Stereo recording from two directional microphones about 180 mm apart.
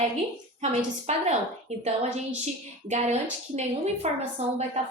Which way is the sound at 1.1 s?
40° right (ahead or behind).